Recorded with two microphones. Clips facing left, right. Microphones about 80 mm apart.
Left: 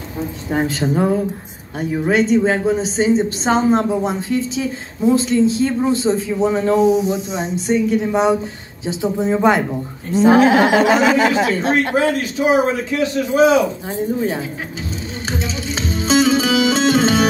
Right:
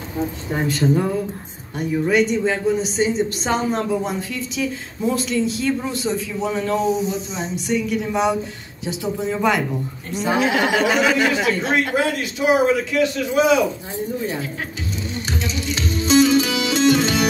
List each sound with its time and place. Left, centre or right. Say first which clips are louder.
0.7 s a woman's voice: even; left
6.8 s speech: left 7 dB; centre
7.5 s a woman's voice: left 5 dB; left
11.7 s a man's voice: left 3 dB; left
15.2 s music: left 3 dB; left